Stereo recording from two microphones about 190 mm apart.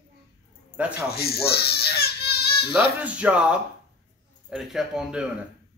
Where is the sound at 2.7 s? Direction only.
5° right (ahead or behind).